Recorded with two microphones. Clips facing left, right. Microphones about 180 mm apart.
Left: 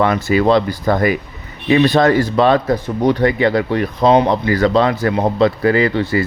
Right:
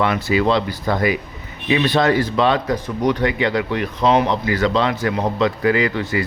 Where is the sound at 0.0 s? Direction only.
45° left (ahead or behind).